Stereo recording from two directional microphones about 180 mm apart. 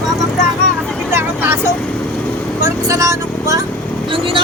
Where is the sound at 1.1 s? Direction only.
15° right (ahead or behind).